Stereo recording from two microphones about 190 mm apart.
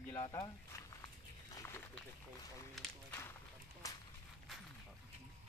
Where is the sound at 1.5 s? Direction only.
15° left (ahead or behind).